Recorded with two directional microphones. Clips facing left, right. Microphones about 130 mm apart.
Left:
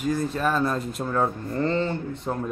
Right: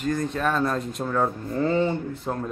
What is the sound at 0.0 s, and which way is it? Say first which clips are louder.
Speech: even; 5° left (ahead or behind).